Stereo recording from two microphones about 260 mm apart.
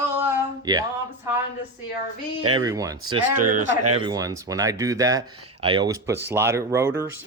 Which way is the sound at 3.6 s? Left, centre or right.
Right.